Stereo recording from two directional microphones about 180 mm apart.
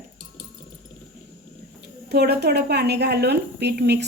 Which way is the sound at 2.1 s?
65° right (ahead or behind).